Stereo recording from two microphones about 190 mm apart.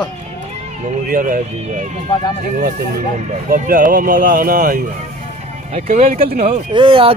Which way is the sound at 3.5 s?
45° right (ahead or behind).